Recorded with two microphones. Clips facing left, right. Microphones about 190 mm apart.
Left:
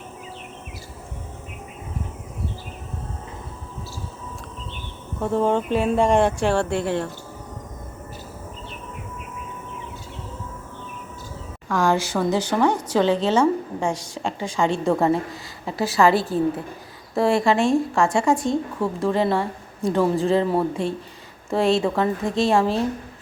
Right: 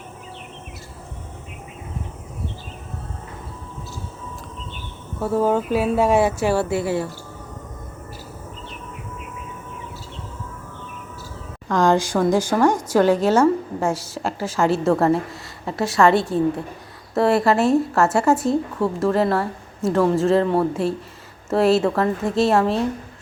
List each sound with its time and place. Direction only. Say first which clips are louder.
5.2 s a woman's voice: right 1 dB; 5° right (ahead or behind)
11.7 s a woman's voice: right 3 dB; 15° right (ahead or behind); by 22.9 s centre (ahead or behind)